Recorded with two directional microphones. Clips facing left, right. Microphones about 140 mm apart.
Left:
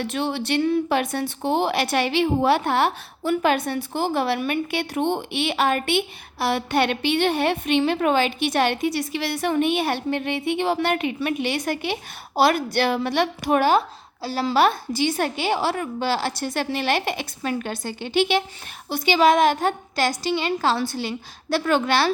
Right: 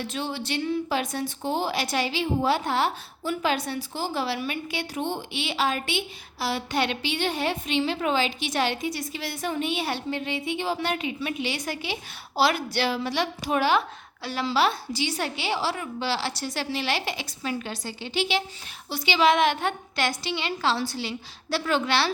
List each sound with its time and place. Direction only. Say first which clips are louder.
0.0 s a woman's voice: left 6 dB; 65° left (ahead or behind); by 14.4 s 35° left (ahead or behind)
14.4 s a woman's voice: left 5 dB; 50° left (ahead or behind)